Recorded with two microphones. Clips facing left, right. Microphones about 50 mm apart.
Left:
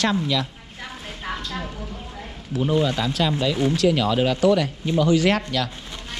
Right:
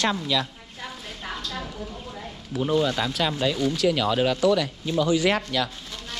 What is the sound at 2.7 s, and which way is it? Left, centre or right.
Speech, left.